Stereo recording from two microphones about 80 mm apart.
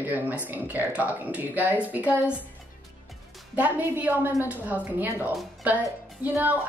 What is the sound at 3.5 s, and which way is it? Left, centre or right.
Speech, right.